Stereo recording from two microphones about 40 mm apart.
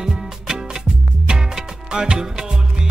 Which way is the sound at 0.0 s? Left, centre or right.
Centre.